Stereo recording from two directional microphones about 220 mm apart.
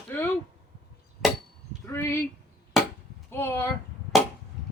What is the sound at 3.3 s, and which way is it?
Speech, 10° left (ahead or behind).